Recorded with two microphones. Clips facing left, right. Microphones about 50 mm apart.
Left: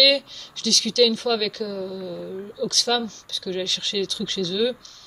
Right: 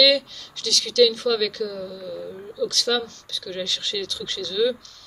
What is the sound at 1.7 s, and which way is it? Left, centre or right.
Speech, left.